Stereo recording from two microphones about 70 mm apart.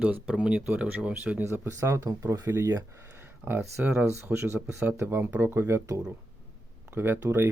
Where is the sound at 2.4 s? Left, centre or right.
Right.